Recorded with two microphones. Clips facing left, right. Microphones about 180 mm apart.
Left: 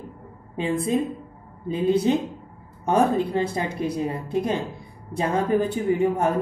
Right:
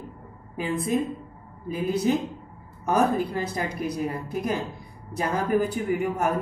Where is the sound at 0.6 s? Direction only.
25° left (ahead or behind).